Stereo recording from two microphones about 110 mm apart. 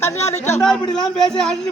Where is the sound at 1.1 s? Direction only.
5° left (ahead or behind).